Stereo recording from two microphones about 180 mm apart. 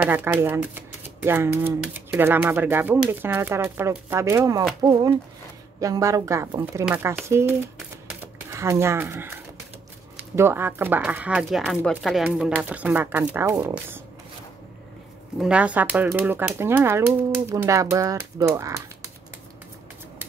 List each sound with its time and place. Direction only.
0.0 s speech: 10° right (ahead or behind)
5.8 s speech: 20° right (ahead or behind)
15.3 s speech: 5° right (ahead or behind)